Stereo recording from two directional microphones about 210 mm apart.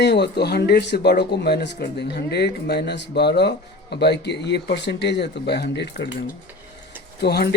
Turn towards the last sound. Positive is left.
turn(degrees=50)  # may be behind; listen again after turning